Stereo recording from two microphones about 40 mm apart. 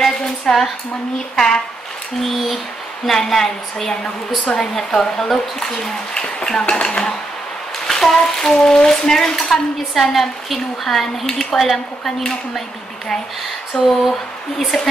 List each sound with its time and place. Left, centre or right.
0.0 s a sound: centre
1.3 s speech: centre
2.2 s a woman's voice: centre
3.1 s speech: centre
7.8 s a sound: centre
8.5 s a woman's voice: centre
13.7 s a woman's voice: centre